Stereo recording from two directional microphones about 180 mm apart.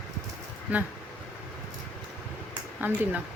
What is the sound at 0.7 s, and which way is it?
Speech, 10° right (ahead or behind).